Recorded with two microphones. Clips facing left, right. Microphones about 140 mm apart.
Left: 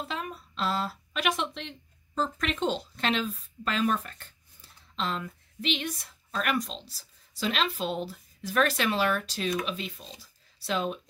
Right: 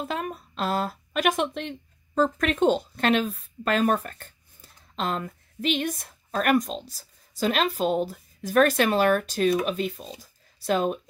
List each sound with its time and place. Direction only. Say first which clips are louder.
0.0 s a woman's voice: right 5 dB; 50° right (ahead or behind)